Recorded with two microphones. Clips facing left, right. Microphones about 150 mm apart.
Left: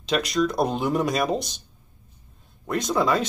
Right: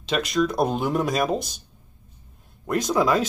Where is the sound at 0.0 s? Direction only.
Centre (ahead or behind).